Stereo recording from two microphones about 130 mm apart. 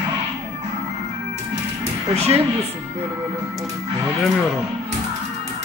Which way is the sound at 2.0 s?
55° right (ahead or behind).